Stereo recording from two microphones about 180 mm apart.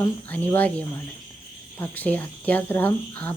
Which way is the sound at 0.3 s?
10° left (ahead or behind).